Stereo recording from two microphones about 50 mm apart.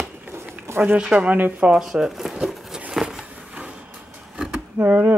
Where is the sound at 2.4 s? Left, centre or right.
Centre.